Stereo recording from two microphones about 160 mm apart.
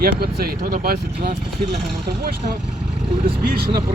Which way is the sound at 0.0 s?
70° right (ahead or behind).